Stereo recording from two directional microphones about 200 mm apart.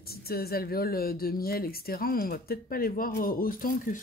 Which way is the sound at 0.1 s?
50° left (ahead or behind).